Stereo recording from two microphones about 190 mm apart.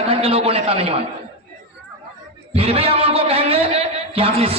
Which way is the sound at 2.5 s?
30° right (ahead or behind).